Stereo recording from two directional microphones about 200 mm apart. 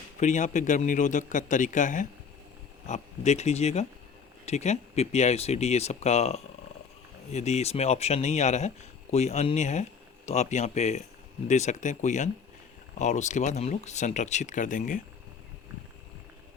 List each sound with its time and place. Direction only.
0.2 s speech: 35° left (ahead or behind)